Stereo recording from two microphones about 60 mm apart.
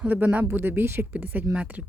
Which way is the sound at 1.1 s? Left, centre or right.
Right.